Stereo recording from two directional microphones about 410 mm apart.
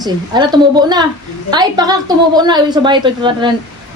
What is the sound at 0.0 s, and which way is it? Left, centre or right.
A woman's voice, centre.